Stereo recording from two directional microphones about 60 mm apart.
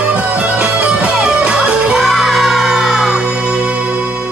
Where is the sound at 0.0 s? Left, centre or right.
Right.